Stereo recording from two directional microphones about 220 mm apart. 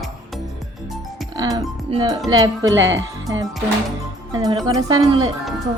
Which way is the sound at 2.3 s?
15° right (ahead or behind).